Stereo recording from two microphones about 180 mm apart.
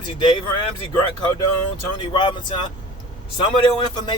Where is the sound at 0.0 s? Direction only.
25° left (ahead or behind).